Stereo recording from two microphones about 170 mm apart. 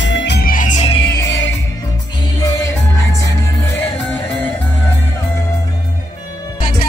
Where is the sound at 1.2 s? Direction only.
90° left.